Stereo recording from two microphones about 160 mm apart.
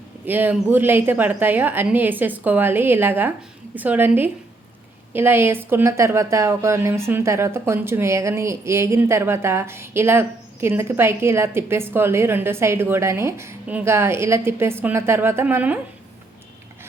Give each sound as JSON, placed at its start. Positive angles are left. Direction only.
{"t": 0.3, "sound": "a woman's voice", "side_deg": -10}